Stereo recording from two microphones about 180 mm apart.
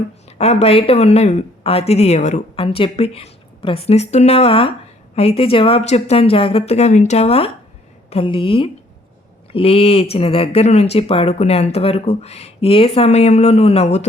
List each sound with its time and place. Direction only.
0.3 s speech: 35° left (ahead or behind)